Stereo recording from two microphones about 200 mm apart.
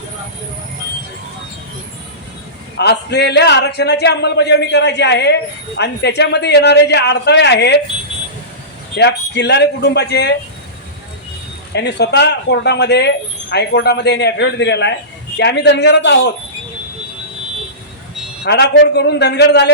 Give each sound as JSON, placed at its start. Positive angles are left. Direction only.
{"t": 2.7, "sound": "a man's voice", "side_deg": 55}
{"t": 9.0, "sound": "a man's voice", "side_deg": 55}
{"t": 11.7, "sound": "a man's voice", "side_deg": 55}
{"t": 18.4, "sound": "a man's voice", "side_deg": 55}